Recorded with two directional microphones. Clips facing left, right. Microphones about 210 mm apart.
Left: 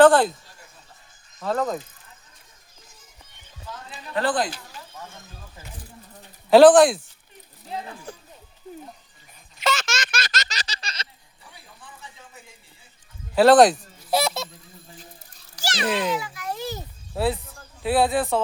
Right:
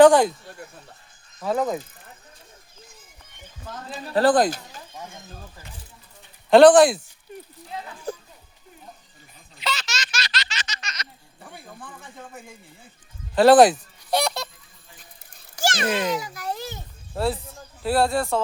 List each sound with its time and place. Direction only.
0.0 s speech: 15° right (ahead or behind)
1.4 s speech: 10° right (ahead or behind)
3.7 s speech: 35° right (ahead or behind)
4.9 s speech: 15° right (ahead or behind)
6.5 s speech: 5° left (ahead or behind)
8.1 s goat: 40° right (ahead or behind)
9.6 s a sound: 50° left (ahead or behind); by 11.1 s 30° left (ahead or behind)
11.3 s speech: 50° right (ahead or behind)
13.3 s speech: centre (ahead or behind)
15.5 s a sound: 50° right (ahead or behind)
16.1 s speech: 40° right (ahead or behind)
17.2 s speech: centre (ahead or behind)